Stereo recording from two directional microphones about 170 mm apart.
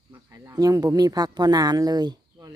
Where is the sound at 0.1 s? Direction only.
15° right (ahead or behind).